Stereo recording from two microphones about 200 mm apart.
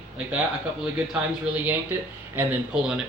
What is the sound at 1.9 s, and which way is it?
Speech, 5° right (ahead or behind).